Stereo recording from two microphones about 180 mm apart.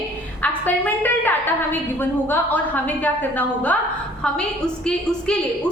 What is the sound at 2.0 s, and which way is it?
A woman's voice, 10° left (ahead or behind).